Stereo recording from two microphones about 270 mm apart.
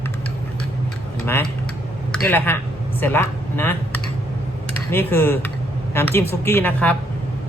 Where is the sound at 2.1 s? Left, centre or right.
Centre.